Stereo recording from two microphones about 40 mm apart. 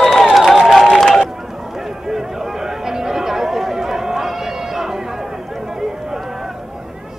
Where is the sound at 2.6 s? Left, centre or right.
Centre.